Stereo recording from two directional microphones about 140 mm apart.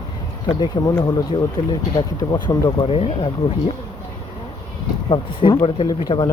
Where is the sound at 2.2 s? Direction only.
30° left (ahead or behind); by 3.3 s 45° left (ahead or behind).